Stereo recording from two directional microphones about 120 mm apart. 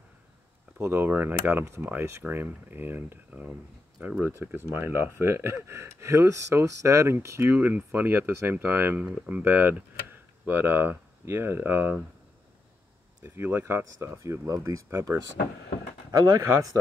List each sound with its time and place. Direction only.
0.7 s speech: 20° right (ahead or behind)
13.2 s speech: 20° right (ahead or behind)